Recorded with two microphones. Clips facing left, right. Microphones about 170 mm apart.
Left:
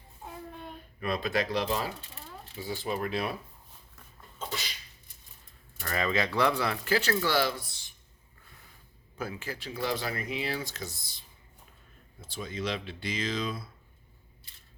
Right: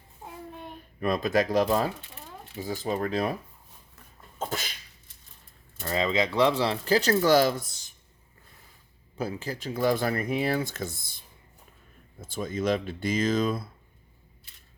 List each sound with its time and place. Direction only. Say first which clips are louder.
0.9 s speech: right 5 dB; 45° right (ahead or behind)
4.4 s sneeze: right 5 dB; 50° right (ahead or behind)
5.8 s speech: right 4 dB; 20° right (ahead or behind); by 7.9 s 45° right (ahead or behind)
9.1 s speech: right 5 dB; 35° right (ahead or behind)